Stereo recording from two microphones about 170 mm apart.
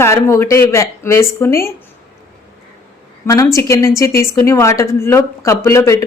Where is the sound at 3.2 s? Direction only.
20° left (ahead or behind).